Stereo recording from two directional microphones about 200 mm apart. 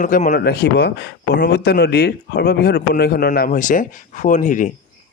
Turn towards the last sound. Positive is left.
turn(degrees=40)  # may be behind; listen again after turning